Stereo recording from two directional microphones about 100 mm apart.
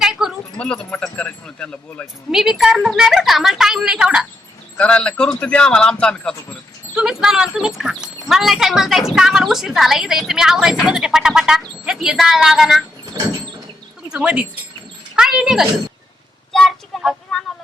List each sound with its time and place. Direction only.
0.0 s a sound: 5° right (ahead or behind)
0.5 s a man's voice: 10° left (ahead or behind)
2.3 s a woman's voice: 5° right (ahead or behind)
4.8 s a man's voice: 10° left (ahead or behind)
6.9 s a woman's voice: 5° right (ahead or behind)
13.1 s sliding door: 35° right (ahead or behind)
14.1 s speech: 10° right (ahead or behind)
15.1 s a sound: 5° right (ahead or behind)
16.5 s child singing: 5° left (ahead or behind)